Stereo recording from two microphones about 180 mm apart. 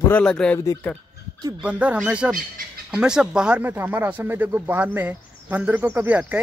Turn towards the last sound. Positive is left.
turn(degrees=-10)  # may be behind; listen again after turning